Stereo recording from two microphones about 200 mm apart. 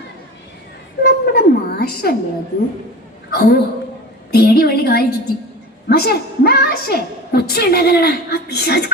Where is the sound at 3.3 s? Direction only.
55° left (ahead or behind).